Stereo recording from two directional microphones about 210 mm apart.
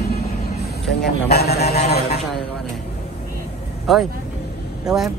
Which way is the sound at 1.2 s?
50° left (ahead or behind).